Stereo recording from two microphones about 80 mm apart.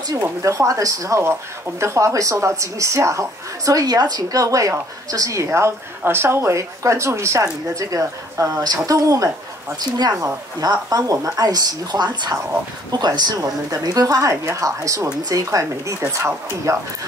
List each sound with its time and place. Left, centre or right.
0.1 s a woman's voice: right
9.8 s a woman's voice: right
13.4 s a woman's voice: right
14.3 s a woman's voice: right
15.2 s a woman's voice: right